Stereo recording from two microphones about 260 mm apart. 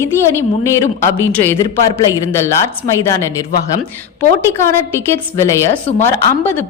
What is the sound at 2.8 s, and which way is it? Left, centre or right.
Speech, centre.